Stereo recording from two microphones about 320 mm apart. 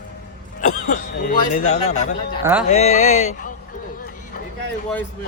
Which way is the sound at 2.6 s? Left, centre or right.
Left.